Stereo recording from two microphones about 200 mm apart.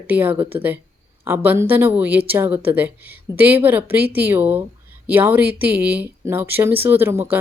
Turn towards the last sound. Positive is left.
turn(degrees=-10)  # may be behind; listen again after turning